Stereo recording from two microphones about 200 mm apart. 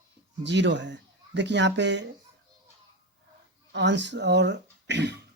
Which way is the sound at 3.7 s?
65° right (ahead or behind).